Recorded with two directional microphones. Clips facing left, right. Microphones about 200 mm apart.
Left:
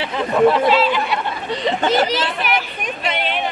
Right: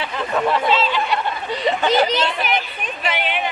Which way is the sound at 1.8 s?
45° left (ahead or behind).